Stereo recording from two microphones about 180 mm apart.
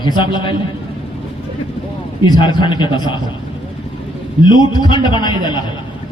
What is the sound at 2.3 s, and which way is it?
Speech, 25° left (ahead or behind).